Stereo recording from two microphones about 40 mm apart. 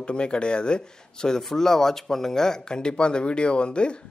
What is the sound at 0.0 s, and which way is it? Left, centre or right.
Speech, left.